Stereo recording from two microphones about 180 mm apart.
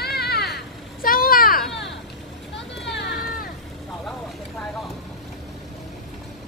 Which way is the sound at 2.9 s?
75° left (ahead or behind).